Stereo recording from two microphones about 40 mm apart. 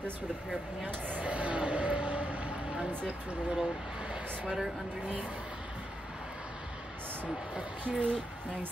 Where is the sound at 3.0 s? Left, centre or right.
Right.